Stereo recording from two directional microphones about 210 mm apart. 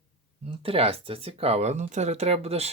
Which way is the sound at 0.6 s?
25° right (ahead or behind).